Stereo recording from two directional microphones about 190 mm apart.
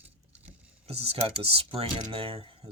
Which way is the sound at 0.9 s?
30° right (ahead or behind).